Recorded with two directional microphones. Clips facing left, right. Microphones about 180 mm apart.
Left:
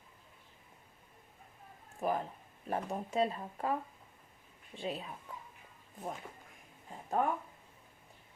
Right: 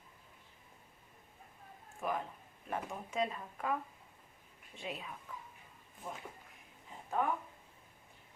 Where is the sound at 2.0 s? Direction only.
35° left (ahead or behind).